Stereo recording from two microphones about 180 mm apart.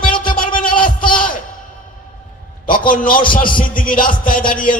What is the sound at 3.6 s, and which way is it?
Music, 50° left (ahead or behind).